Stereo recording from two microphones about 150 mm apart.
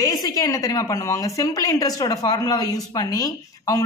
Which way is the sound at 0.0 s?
25° left (ahead or behind).